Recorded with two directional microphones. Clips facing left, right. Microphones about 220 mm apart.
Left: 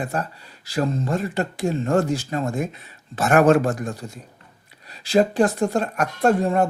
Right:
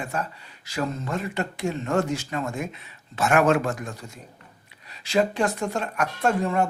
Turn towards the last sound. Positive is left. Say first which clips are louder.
# left 4 dB
turn(degrees=35)  # may be behind; listen again after turning